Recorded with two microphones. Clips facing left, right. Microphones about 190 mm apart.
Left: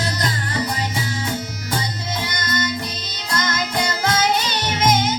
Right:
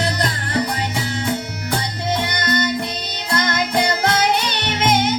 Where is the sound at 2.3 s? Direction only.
60° right (ahead or behind).